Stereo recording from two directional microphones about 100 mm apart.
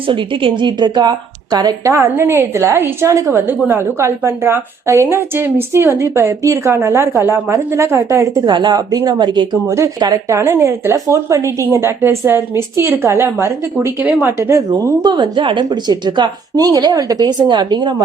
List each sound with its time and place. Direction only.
0.1 s speech: 55° right (ahead or behind)
1.9 s a woman's voice: 25° right (ahead or behind)
8.4 s speech: 45° right (ahead or behind)
9.6 s a woman's voice: 30° right (ahead or behind)
14.7 s speech: 40° right (ahead or behind)